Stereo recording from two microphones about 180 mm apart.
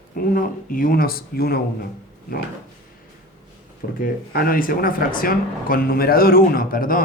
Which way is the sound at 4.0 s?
55° left (ahead or behind).